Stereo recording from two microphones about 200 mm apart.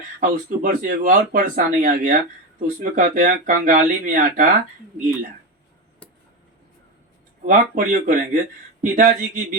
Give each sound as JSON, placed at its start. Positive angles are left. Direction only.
{"t": 0.2, "sound": "speech", "side_deg": -45}
{"t": 7.4, "sound": "speech", "side_deg": -45}